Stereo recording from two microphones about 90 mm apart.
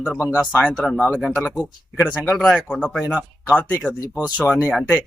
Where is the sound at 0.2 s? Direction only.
15° right (ahead or behind).